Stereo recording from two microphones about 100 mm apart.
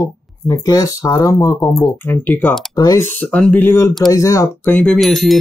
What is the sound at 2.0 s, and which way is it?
Speech, 20° left (ahead or behind).